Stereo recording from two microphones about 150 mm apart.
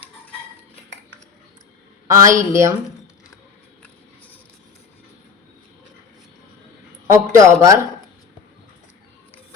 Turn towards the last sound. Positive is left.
turn(degrees=-20)  # may be behind; listen again after turning